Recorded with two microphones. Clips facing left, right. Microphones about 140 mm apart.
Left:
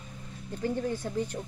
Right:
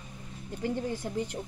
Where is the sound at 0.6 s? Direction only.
15° right (ahead or behind).